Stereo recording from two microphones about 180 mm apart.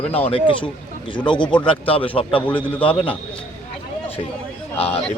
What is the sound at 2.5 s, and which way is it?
Speech, 5° left (ahead or behind).